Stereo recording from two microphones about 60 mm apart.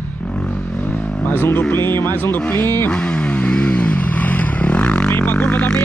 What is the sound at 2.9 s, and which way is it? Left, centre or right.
Vehicle, centre.